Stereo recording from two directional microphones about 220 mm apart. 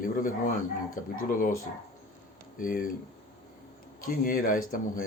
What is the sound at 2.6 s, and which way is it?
Speech, 40° left (ahead or behind).